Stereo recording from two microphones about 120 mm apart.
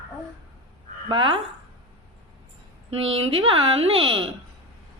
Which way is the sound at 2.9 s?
55° right (ahead or behind).